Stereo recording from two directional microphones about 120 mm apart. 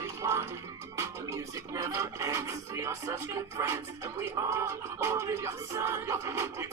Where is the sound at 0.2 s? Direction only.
25° right (ahead or behind).